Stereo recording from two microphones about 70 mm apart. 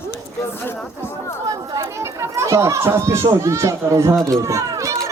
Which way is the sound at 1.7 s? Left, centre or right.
Right.